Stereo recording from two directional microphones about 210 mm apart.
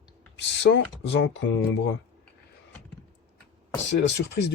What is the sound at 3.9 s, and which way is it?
Speech, 55° left (ahead or behind).